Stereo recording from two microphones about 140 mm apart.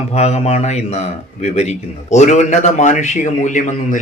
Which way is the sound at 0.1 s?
50° left (ahead or behind).